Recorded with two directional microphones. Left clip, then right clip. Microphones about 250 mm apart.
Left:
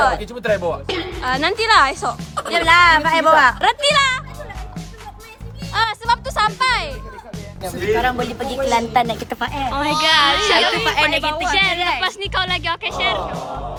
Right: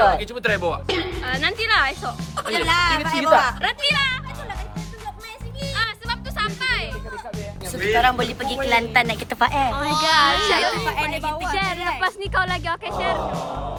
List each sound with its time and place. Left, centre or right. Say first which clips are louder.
0.0 s a woman's voice: even; centre
1.3 s speech: left 6 dB; centre
2.6 s speech: left 9 dB; left
3.6 s speech: left 6 dB; centre
5.7 s music: left 8 dB; centre
8.4 s speech: left 2 dB; centre
9.3 s speech: right 2 dB; centre
10.9 s speech: left 7 dB; centre
11.4 s speech: left 6 dB; centre